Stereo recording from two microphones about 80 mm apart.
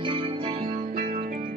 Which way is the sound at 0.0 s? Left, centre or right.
Right.